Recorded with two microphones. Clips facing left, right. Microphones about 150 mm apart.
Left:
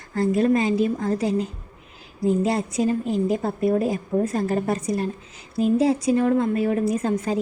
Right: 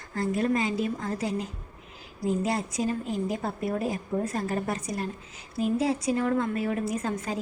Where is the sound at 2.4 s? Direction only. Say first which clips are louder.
Left 6 dB; 25° left (ahead or behind).